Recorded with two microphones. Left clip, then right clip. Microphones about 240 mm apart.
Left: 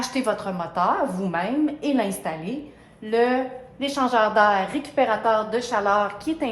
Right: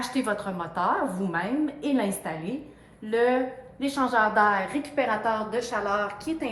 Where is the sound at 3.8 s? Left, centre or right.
Left.